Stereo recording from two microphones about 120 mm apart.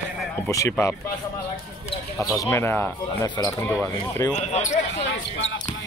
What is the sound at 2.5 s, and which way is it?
Speech, 15° left (ahead or behind).